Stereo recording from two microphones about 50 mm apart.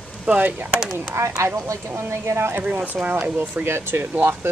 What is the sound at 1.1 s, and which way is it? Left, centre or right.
Speech, right.